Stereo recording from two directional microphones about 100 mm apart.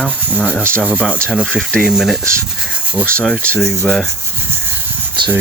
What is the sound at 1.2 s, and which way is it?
Speech, 5° left (ahead or behind).